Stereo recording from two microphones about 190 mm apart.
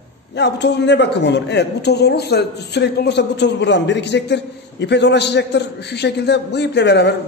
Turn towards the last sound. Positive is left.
turn(degrees=65)  # may be behind; listen again after turning